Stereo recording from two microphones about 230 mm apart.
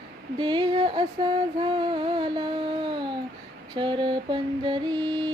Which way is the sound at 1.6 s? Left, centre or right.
Centre.